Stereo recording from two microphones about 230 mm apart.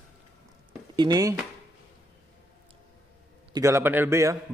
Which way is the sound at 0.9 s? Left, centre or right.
Centre.